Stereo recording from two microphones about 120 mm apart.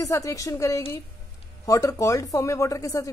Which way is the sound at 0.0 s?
25° left (ahead or behind).